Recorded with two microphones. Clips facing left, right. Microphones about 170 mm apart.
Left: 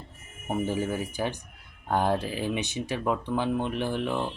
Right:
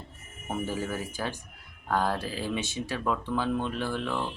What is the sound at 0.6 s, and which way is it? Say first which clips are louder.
Speech: left 4 dB; 20° left (ahead or behind).